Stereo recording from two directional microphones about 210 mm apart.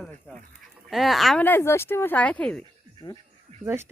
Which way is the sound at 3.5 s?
30° right (ahead or behind).